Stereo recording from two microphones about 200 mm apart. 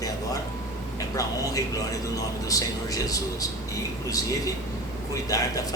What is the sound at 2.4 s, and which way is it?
A man's voice, 15° left (ahead or behind).